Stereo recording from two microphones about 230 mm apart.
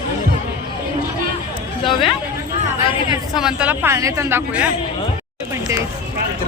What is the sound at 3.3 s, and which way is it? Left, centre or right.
Speech, centre.